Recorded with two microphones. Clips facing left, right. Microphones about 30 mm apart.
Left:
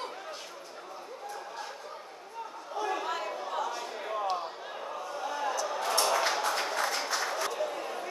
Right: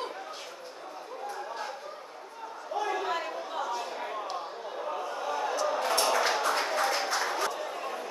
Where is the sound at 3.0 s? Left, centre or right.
Centre.